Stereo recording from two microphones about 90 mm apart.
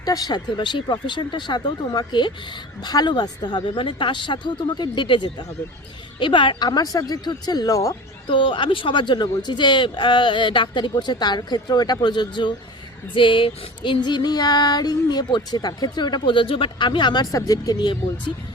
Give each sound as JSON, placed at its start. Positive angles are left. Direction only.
{"t": 0.0, "sound": "speech", "side_deg": 45}
{"t": 6.1, "sound": "female singing", "side_deg": 65}
{"t": 8.3, "sound": "speech", "side_deg": 65}
{"t": 10.9, "sound": "female singing", "side_deg": 55}
{"t": 15.4, "sound": "speech", "side_deg": 50}
{"t": 17.3, "sound": "female singing", "side_deg": 40}